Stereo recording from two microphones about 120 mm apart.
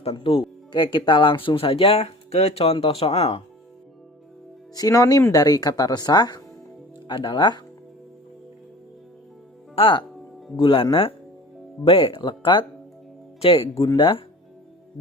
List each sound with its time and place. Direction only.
0.0 s speech: 50° left (ahead or behind)
4.7 s speech: 30° left (ahead or behind)
9.7 s speech: 45° left (ahead or behind)
11.9 s speech: 50° left (ahead or behind)